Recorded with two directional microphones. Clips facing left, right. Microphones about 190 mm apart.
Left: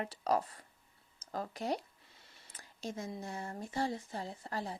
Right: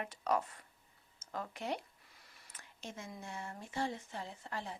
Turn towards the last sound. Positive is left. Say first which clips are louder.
# left 4 dB
turn(degrees=35)  # may be behind; listen again after turning